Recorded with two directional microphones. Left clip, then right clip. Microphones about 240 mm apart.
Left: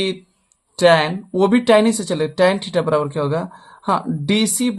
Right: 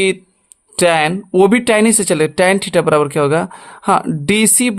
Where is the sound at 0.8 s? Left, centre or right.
Right.